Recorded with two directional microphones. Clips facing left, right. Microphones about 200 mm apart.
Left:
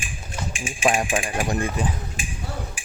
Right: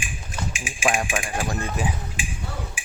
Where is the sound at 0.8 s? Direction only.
30° left (ahead or behind).